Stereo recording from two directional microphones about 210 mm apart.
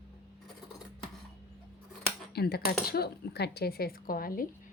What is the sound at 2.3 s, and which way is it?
A woman's voice, 50° left (ahead or behind).